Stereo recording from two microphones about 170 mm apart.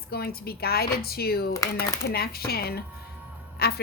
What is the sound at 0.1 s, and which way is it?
Speech, 65° left (ahead or behind).